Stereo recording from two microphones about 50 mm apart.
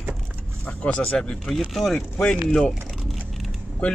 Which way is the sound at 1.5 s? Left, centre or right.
Centre.